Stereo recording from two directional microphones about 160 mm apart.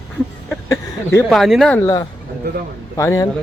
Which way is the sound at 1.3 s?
Centre (ahead or behind).